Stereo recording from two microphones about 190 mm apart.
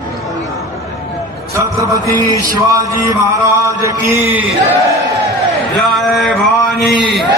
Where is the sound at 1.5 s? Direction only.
15° right (ahead or behind).